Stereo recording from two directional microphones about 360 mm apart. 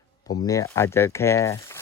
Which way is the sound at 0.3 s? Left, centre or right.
Centre.